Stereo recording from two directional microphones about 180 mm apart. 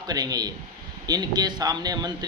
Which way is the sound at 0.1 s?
20° right (ahead or behind).